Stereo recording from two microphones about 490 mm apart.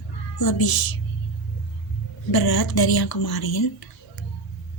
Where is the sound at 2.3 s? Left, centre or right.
Left.